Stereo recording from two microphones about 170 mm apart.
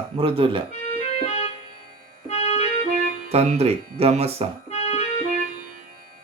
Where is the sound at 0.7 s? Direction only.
35° left (ahead or behind).